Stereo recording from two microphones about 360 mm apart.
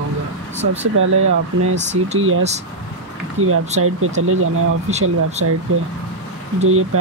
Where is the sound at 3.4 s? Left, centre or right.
Right.